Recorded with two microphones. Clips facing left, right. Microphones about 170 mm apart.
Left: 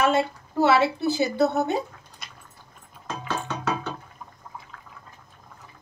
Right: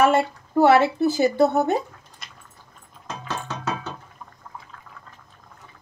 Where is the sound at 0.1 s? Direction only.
50° right (ahead or behind).